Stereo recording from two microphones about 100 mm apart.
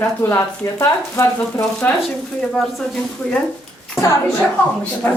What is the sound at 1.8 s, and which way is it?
Speech, 15° left (ahead or behind).